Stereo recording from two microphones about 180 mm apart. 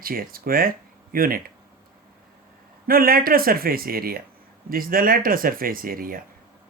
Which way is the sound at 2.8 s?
55° right (ahead or behind).